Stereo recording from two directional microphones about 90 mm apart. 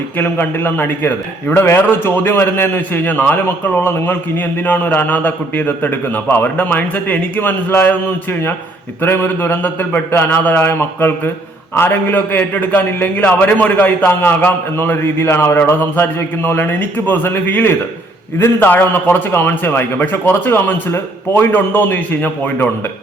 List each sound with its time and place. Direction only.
0.2 s a man's voice: 25° left (ahead or behind)